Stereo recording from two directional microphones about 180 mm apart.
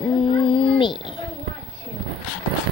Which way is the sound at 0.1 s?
30° left (ahead or behind).